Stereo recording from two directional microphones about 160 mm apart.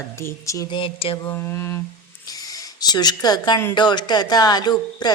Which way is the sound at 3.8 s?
25° left (ahead or behind).